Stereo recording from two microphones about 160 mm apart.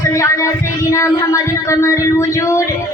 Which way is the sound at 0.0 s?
20° left (ahead or behind).